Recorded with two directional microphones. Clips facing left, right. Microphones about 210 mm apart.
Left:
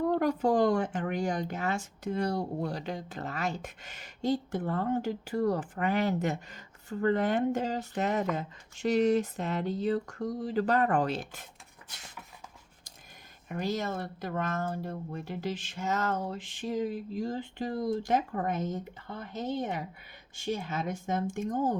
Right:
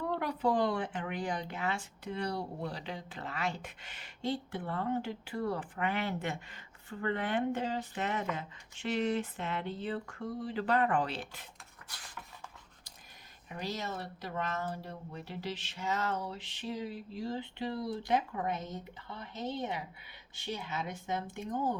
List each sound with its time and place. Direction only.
0.0 s speech: 45° left (ahead or behind)
13.5 s speech: 50° left (ahead or behind)